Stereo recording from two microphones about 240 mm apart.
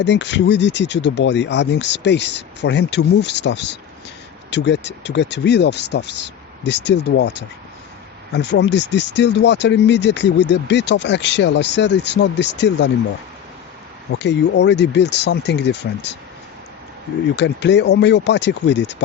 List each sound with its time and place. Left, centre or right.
0.0 s speech: left
14.1 s speech: left
17.3 s speech: left